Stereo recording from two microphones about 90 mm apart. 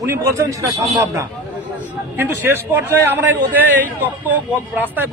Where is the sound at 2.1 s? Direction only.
25° right (ahead or behind).